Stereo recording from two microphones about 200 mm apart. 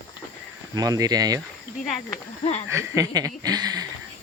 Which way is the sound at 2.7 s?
15° right (ahead or behind).